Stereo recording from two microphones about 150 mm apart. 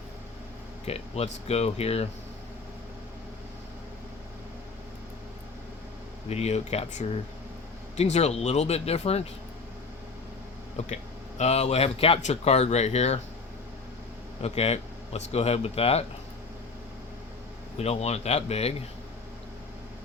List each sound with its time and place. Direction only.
0.9 s speech: 40° left (ahead or behind)
6.2 s speech: 45° left (ahead or behind)
10.8 s speech: 50° left (ahead or behind)
14.4 s speech: 45° left (ahead or behind)
17.7 s speech: 45° left (ahead or behind)